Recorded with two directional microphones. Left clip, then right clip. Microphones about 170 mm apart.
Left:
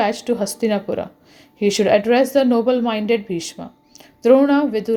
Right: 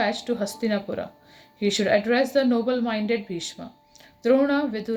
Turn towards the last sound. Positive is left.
turn(degrees=40)  # may be behind; listen again after turning